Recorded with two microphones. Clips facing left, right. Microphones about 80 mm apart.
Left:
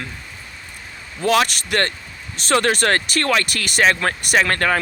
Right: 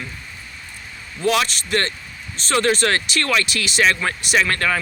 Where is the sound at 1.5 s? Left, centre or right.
Left.